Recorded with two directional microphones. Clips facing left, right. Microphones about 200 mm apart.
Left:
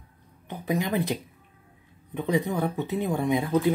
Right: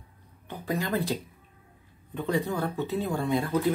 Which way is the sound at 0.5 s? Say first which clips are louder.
Left 2 dB; 20° left (ahead or behind).